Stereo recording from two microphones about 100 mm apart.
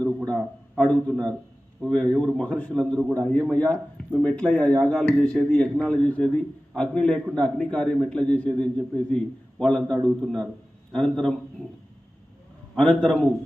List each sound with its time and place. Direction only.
0.8 s a man's voice: 10° left (ahead or behind)
12.7 s a man's voice: 10° left (ahead or behind)